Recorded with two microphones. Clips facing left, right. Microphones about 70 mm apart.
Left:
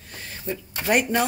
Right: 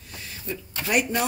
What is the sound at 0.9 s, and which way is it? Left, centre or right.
Speech, left.